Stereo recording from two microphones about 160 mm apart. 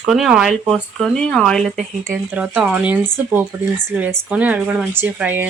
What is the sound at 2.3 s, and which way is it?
Speech, 10° right (ahead or behind).